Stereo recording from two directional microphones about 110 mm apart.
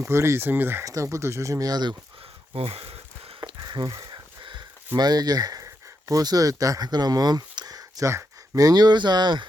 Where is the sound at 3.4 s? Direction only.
40° right (ahead or behind).